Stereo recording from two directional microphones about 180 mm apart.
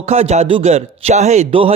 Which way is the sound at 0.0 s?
35° right (ahead or behind).